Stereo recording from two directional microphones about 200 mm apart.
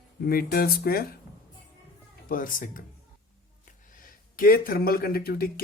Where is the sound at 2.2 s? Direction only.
45° left (ahead or behind).